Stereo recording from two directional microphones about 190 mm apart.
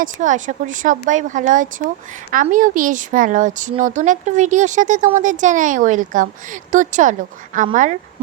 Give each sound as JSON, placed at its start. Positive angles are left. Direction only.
{"t": 0.0, "sound": "a woman's voice", "side_deg": -40}